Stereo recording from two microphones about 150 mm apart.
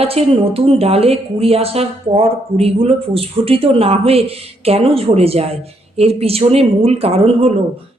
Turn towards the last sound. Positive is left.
turn(degrees=-40)  # may be behind; listen again after turning